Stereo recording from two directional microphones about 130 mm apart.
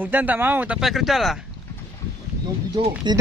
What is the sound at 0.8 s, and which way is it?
Speech, centre (ahead or behind).